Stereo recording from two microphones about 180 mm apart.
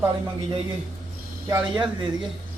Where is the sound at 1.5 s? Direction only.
10° right (ahead or behind).